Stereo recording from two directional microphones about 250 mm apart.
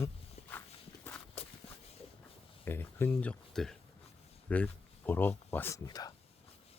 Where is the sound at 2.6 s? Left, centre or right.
Centre.